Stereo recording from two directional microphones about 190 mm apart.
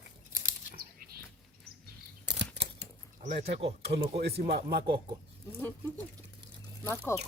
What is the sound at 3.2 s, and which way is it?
Speech, 55° right (ahead or behind).